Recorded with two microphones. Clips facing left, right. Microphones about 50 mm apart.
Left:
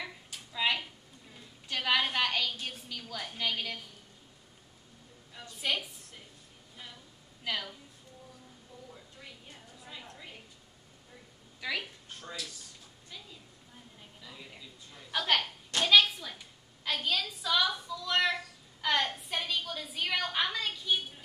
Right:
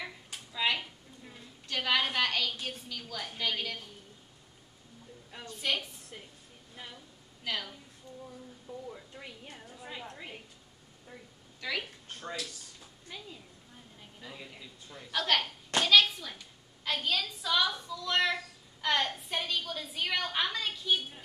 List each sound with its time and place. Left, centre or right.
0.0 s a sound: centre
1.7 s a woman's voice: centre
5.6 s a woman's voice: centre
7.4 s a woman's voice: centre
8.7 s a sound: right
11.6 s a woman's voice: centre
12.2 s speech: right
14.2 s speech: right
15.0 s a woman's voice: centre